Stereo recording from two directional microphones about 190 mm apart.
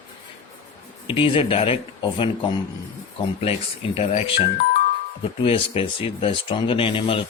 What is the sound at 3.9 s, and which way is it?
Speech, 35° left (ahead or behind).